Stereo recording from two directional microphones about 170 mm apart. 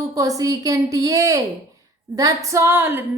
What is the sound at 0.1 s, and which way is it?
A woman's voice, 20° right (ahead or behind).